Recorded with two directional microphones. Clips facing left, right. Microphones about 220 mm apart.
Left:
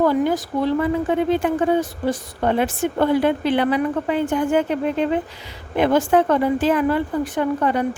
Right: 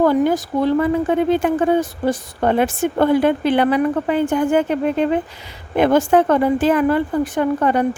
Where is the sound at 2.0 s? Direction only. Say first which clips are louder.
Right 4 dB; 50° right (ahead or behind).